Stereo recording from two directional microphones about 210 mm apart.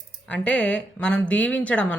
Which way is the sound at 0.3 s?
5° left (ahead or behind).